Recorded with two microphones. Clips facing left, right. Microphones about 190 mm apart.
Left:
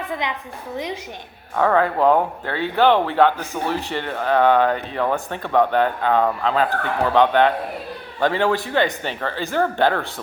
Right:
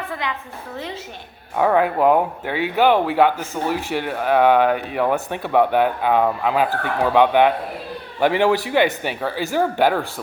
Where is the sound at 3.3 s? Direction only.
15° left (ahead or behind).